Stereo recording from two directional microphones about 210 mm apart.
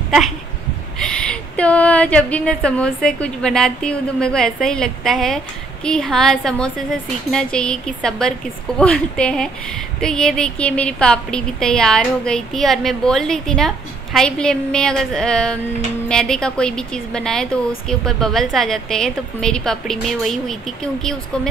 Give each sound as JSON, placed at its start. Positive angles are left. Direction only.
{"t": 1.0, "sound": "a woman's voice", "side_deg": 5}